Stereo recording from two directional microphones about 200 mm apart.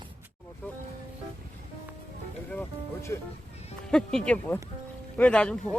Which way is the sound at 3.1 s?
20° left (ahead or behind).